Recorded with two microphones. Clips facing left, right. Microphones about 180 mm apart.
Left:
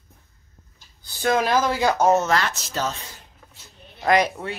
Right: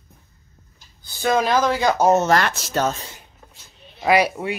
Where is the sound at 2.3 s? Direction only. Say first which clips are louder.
Right 4 dB; 50° right (ahead or behind).